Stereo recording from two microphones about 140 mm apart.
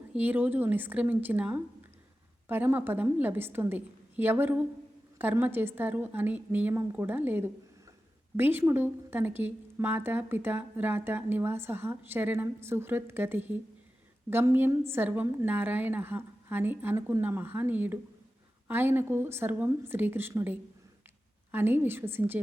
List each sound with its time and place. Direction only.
0.1 s speech: 10° right (ahead or behind)